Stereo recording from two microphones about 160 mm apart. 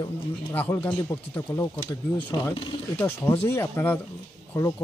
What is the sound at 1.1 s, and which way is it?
Speech, 20° left (ahead or behind).